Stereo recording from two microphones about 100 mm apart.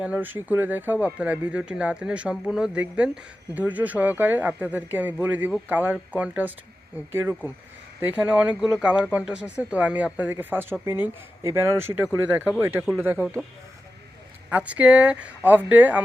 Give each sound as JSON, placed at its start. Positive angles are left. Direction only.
{"t": 0.0, "sound": "speech", "side_deg": -15}
{"t": 14.5, "sound": "speech", "side_deg": -15}